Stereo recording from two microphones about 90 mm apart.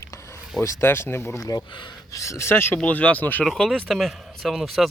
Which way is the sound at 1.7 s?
60° left (ahead or behind).